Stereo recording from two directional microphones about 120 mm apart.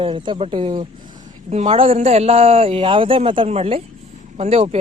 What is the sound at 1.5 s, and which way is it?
Speech, 65° right (ahead or behind).